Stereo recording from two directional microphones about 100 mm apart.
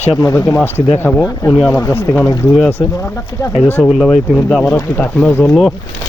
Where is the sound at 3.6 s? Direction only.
25° left (ahead or behind).